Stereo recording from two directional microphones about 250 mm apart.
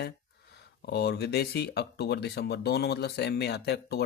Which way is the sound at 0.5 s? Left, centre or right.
Left.